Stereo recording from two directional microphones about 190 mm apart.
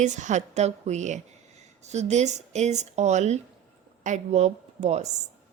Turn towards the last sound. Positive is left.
turn(degrees=-35)  # may be behind; listen again after turning